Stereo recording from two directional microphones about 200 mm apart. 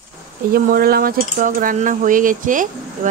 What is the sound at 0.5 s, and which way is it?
Speech, 50° right (ahead or behind).